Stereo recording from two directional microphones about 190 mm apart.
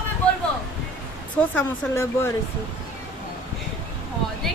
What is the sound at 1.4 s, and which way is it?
Speech, 10° left (ahead or behind).